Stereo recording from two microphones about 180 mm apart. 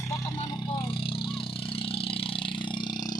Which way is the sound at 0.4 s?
25° left (ahead or behind).